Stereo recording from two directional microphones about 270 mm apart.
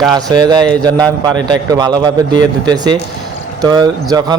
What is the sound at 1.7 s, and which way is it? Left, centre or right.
A man's voice, centre.